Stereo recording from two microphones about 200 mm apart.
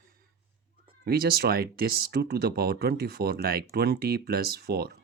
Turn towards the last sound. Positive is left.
turn(degrees=-50)  # may be behind; listen again after turning